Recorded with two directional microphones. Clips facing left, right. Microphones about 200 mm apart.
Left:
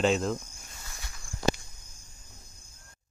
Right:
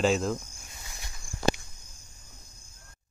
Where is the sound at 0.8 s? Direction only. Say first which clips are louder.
Even; 15° right (ahead or behind).